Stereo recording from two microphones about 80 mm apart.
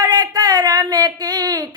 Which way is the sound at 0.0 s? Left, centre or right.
Right.